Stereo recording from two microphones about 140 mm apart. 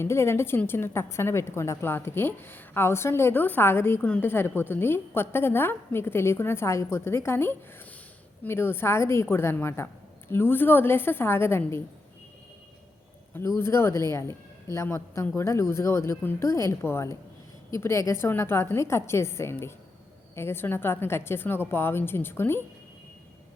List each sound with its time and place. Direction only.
0.0 s a woman's voice: 20° left (ahead or behind)
13.6 s a woman's voice: 20° left (ahead or behind)